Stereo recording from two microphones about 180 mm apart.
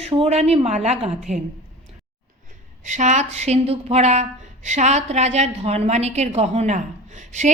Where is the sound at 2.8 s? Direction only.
40° right (ahead or behind).